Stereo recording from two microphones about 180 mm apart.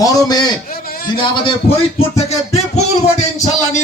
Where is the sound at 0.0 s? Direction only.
20° left (ahead or behind).